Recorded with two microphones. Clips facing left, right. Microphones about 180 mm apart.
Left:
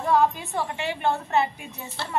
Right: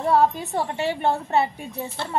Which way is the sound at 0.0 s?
30° right (ahead or behind).